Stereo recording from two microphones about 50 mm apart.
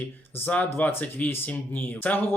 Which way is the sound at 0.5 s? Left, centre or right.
Left.